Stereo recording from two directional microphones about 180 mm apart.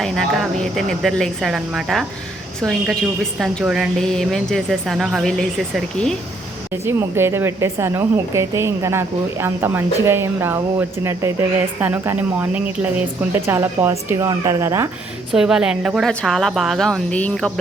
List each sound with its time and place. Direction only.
0.0 s a woman's voice: centre (ahead or behind)
6.8 s a woman's voice: 15° right (ahead or behind)
15.3 s a woman's voice: 5° right (ahead or behind)